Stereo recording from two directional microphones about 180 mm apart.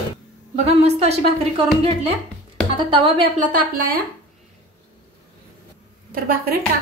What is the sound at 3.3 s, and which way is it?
Speech, 50° right (ahead or behind).